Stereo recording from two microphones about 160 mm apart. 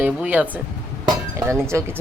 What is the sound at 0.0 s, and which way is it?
Speech, 10° right (ahead or behind).